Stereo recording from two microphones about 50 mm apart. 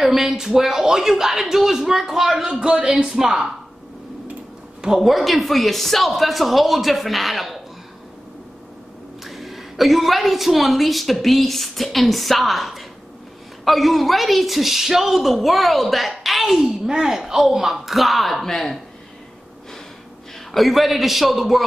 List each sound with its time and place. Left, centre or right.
0.0 s a woman's voice: centre
2.5 s a man's voice: centre
4.8 s a man's voice: centre
9.2 s a man's voice: centre
20.5 s a man's voice: centre